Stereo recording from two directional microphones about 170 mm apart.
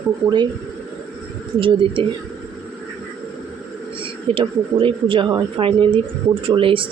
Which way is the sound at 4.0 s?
30° right (ahead or behind).